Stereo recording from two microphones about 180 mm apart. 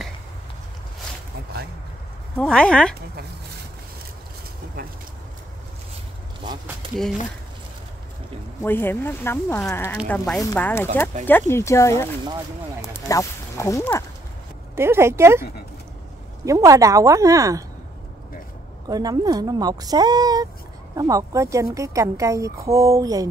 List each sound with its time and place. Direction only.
2.3 s speech: 5° left (ahead or behind)
8.6 s speech: 10° left (ahead or behind)
14.8 s a woman's voice: 15° right (ahead or behind)
16.4 s a woman's voice: 20° right (ahead or behind)
18.9 s a woman's voice: 20° right (ahead or behind)